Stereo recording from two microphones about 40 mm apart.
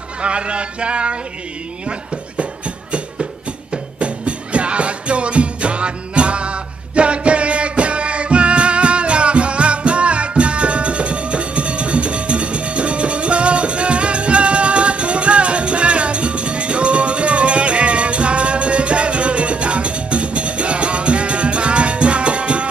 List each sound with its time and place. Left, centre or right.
0.2 s speech: right
1.9 s a sound: right
3.7 s music: right